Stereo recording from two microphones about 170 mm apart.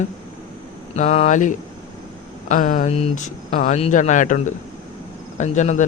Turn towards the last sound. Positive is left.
turn(degrees=45)  # may be behind; listen again after turning